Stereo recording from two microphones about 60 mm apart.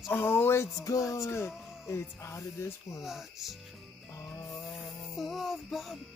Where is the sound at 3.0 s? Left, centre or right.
Centre.